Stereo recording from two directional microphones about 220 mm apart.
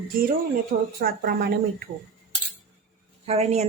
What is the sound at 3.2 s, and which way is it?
Speech, 30° right (ahead or behind).